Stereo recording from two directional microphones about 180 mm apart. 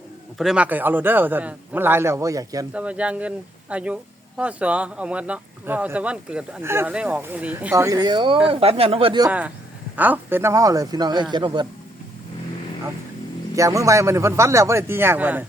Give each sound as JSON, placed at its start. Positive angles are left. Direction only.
{"t": 0.3, "sound": "speech", "side_deg": -5}
{"t": 2.7, "sound": "speech", "side_deg": -5}
{"t": 9.9, "sound": "speech", "side_deg": -10}
{"t": 13.6, "sound": "speech", "side_deg": -15}